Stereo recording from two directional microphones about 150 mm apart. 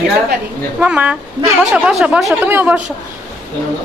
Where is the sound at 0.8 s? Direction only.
10° right (ahead or behind).